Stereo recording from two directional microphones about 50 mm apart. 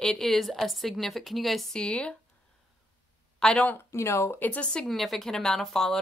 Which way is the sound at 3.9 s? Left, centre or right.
Left.